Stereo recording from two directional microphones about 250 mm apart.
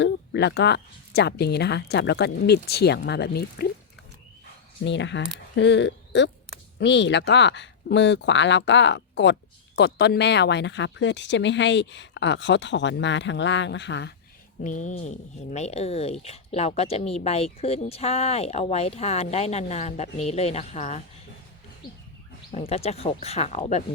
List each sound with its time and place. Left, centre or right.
0.0 s speech: left
4.9 s speech: left
14.6 s speech: left
22.5 s speech: left